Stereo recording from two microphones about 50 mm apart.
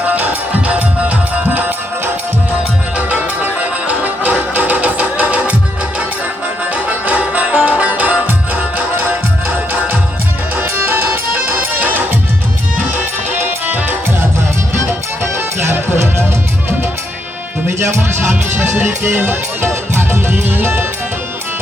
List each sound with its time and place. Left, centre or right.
0.0 s music: right
3.0 s music: right
6.7 s music: right
10.5 s music: right
14.7 s music: right
17.7 s music: right
20.0 s music: right